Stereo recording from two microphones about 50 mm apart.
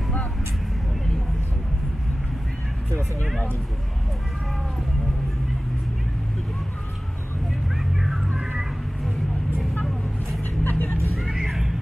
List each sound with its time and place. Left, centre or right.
7.7 s vehicle: centre
10.4 s music: left
11.4 s a sound: centre